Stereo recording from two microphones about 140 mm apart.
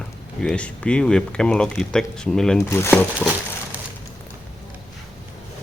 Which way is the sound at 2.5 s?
20° left (ahead or behind).